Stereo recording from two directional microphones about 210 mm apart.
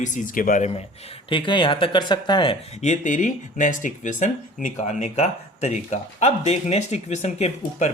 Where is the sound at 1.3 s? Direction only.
25° left (ahead or behind).